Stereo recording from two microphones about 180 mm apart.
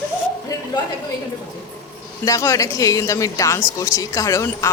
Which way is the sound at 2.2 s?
15° left (ahead or behind).